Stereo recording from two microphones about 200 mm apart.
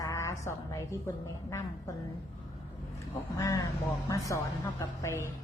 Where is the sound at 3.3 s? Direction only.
15° left (ahead or behind).